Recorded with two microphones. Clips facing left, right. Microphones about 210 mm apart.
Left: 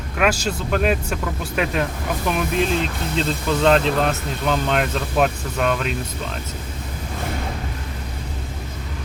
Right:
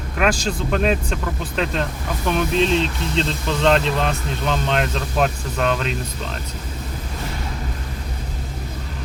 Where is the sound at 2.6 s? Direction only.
55° left (ahead or behind).